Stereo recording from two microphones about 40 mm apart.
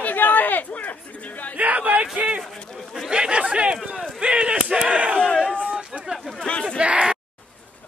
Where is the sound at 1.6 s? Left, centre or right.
Right.